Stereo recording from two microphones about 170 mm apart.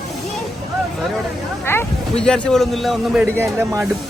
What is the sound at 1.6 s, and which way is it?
Speech, 10° left (ahead or behind).